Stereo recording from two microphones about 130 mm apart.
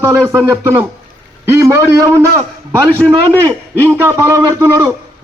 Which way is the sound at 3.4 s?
25° right (ahead or behind).